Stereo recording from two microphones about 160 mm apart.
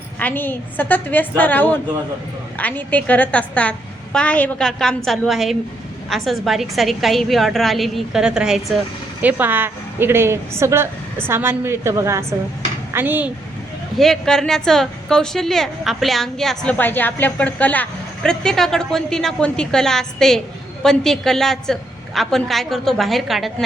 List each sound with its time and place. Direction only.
0.2 s a woman's voice: 10° left (ahead or behind); by 13.3 s 10° right (ahead or behind)
14.0 s a woman's voice: 5° left (ahead or behind)